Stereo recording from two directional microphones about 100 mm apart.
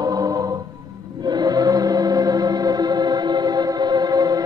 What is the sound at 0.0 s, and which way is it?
Music, 40° right (ahead or behind).